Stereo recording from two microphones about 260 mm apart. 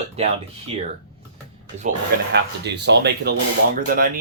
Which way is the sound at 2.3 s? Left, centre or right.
Right.